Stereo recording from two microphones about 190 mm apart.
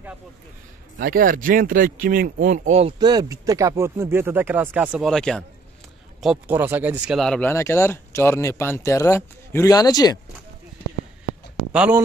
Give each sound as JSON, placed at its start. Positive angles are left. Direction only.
{"t": 0.9, "sound": "speech", "side_deg": -45}
{"t": 3.0, "sound": "speech", "side_deg": -20}
{"t": 7.2, "sound": "speech", "side_deg": 5}
{"t": 11.7, "sound": "speech", "side_deg": -5}